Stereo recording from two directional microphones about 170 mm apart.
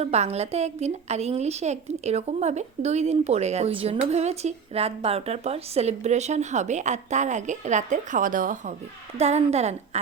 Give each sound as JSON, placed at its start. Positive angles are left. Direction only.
{"t": 0.0, "sound": "a woman's voice", "side_deg": -40}
{"t": 9.1, "sound": "a woman's voice", "side_deg": -40}